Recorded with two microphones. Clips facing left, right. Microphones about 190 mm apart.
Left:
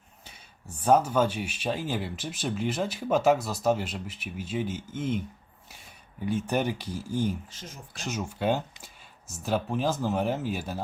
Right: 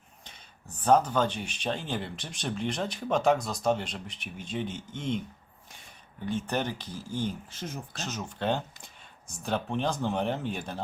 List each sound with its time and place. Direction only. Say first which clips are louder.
0.3 s speech: left 3 dB; 10° left (ahead or behind)
6.2 s speech: left 3 dB; 10° left (ahead or behind)